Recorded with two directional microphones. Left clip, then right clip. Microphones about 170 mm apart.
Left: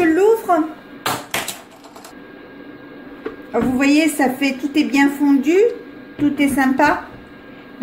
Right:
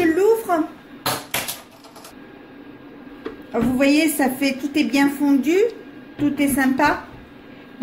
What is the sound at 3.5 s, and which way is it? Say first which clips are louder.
A woman's voice: left 2 dB; centre (ahead or behind).